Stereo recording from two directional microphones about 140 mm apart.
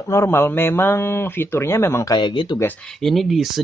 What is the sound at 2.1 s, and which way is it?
Speech, 35° left (ahead or behind).